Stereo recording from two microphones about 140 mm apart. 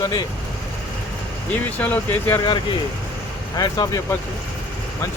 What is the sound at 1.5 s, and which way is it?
Speech, 10° left (ahead or behind).